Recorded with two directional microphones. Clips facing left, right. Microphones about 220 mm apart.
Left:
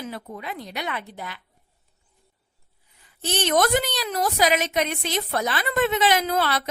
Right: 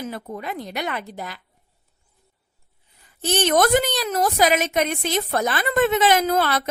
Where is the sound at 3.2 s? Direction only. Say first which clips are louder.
Right 3 dB; 50° right (ahead or behind).